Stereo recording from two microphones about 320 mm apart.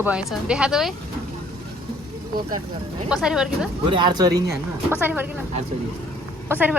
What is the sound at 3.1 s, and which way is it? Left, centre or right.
Speech, centre.